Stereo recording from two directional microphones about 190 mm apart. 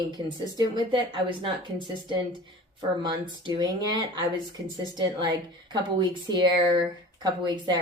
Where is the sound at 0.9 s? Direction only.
25° right (ahead or behind).